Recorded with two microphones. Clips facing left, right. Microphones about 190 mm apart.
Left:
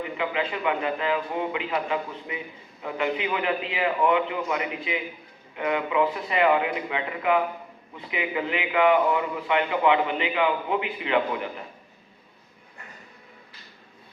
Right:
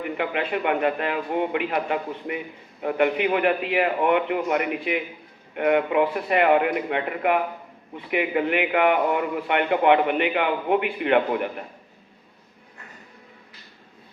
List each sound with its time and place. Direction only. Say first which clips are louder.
0.0 s a man's voice: right 2 dB; 55° right (ahead or behind)